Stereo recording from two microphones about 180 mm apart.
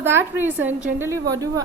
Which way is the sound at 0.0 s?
15° right (ahead or behind).